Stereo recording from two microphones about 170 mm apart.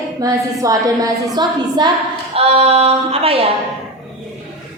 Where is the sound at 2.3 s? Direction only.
35° right (ahead or behind).